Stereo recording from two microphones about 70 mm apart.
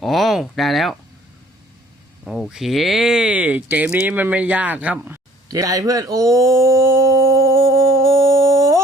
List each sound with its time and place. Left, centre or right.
0.0 s speech: centre
2.2 s speech: centre
3.3 s speech: centre
5.5 s a sound: right